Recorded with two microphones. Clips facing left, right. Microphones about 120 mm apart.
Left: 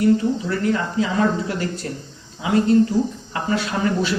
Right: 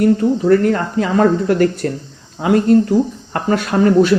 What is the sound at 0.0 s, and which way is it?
Speech, 55° right (ahead or behind).